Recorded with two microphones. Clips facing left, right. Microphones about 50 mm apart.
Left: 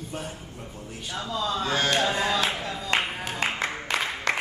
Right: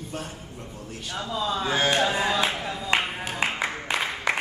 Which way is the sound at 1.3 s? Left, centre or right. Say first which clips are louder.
Right 1 dB; centre.